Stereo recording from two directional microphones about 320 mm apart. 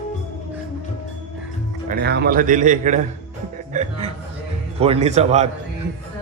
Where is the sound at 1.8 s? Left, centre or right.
Right.